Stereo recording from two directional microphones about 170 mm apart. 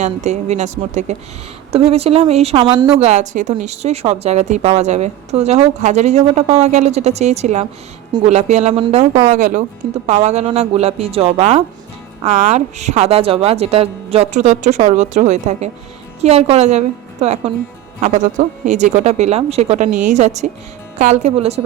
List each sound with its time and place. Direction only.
0.0 s a woman's voice: 40° right (ahead or behind)
3.0 s a woman's voice: 45° right (ahead or behind)
9.2 s a woman's voice: 50° right (ahead or behind)